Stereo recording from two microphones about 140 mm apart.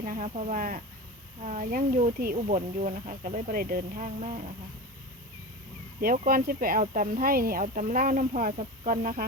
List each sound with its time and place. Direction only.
0.0 s speech: 70° right (ahead or behind)
6.0 s speech: 90° right